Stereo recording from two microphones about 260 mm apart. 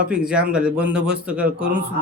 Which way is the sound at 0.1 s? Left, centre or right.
Centre.